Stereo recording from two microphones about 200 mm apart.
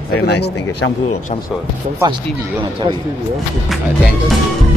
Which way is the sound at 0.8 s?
90° left.